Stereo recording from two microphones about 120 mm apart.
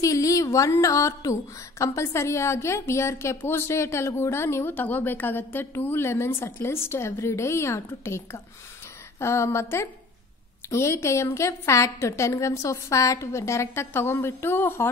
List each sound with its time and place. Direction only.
0.0 s a woman's voice: 25° left (ahead or behind)